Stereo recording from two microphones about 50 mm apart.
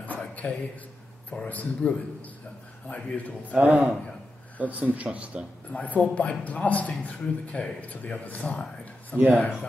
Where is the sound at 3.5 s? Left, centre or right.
Right.